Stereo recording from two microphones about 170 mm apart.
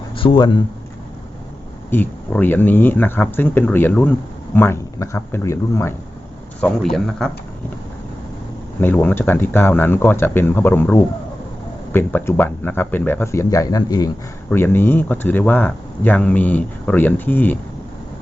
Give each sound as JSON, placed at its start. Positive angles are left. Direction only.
{"t": 0.2, "sound": "speech", "side_deg": 30}
{"t": 1.9, "sound": "speech", "side_deg": 10}
{"t": 7.2, "sound": "speech", "side_deg": 0}
{"t": 8.8, "sound": "speech", "side_deg": 10}